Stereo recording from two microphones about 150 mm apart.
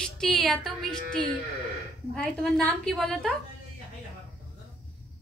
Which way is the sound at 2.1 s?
Centre (ahead or behind).